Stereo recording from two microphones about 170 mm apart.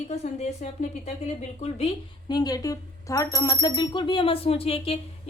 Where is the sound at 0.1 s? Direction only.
40° left (ahead or behind).